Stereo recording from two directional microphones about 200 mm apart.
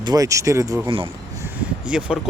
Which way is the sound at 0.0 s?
20° right (ahead or behind).